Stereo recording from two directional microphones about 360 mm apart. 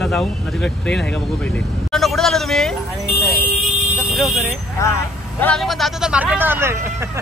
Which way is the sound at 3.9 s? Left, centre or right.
Centre.